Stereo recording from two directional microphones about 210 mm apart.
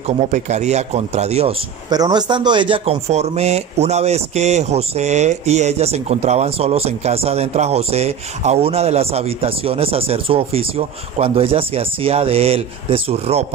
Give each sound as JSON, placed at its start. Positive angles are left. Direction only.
{"t": 0.3, "sound": "speech", "side_deg": -35}
{"t": 1.9, "sound": "speech", "side_deg": -20}